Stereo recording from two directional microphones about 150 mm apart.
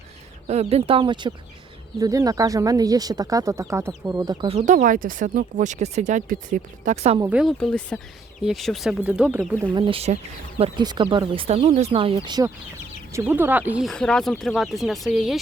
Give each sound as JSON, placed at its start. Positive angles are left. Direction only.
{"t": 0.4, "sound": "speech", "side_deg": -45}
{"t": 4.4, "sound": "speech", "side_deg": -50}
{"t": 7.3, "sound": "speech", "side_deg": -5}
{"t": 7.6, "sound": "speech", "side_deg": 5}
{"t": 9.7, "sound": "speech", "side_deg": -35}
{"t": 13.1, "sound": "speech", "side_deg": -15}
{"t": 13.8, "sound": "speech", "side_deg": 5}